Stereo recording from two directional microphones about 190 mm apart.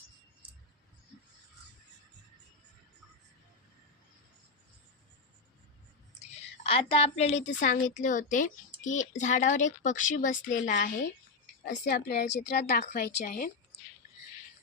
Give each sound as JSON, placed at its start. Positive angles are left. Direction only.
{"t": 6.6, "sound": "a woman's voice", "side_deg": 30}